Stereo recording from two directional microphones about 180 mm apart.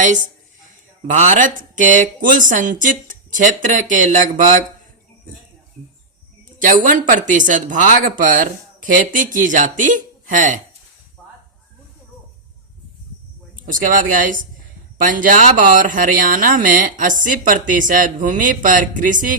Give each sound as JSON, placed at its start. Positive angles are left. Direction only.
{"t": 1.1, "sound": "speech", "side_deg": -45}
{"t": 6.6, "sound": "speech", "side_deg": -45}
{"t": 13.6, "sound": "speech", "side_deg": -50}